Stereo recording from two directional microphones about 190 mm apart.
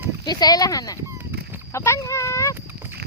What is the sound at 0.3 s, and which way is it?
Speech, 20° left (ahead or behind).